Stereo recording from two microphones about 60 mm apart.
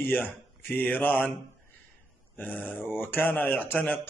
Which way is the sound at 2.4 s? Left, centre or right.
Left.